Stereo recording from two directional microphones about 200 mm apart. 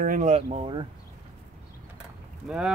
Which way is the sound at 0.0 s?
40° right (ahead or behind).